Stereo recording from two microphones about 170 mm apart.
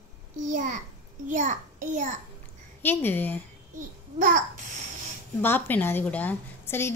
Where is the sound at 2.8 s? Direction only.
10° left (ahead or behind).